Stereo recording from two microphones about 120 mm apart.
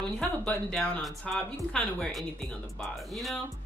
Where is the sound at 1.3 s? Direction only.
5° left (ahead or behind).